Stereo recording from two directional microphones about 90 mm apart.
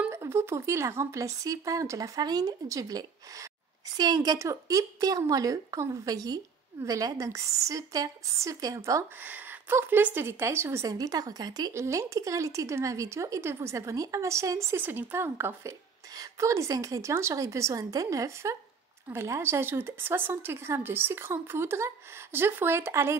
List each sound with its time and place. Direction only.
0.1 s a woman's voice: 30° right (ahead or behind)
9.2 s speech: 20° right (ahead or behind); by 11.7 s 45° right (ahead or behind)
11.7 s a woman's voice: 35° right (ahead or behind)